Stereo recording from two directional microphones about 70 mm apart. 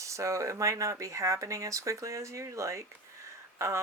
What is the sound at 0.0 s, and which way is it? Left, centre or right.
Speech, right.